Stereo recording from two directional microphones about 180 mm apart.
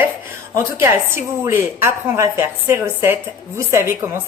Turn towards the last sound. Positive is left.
turn(degrees=-15)  # may be behind; listen again after turning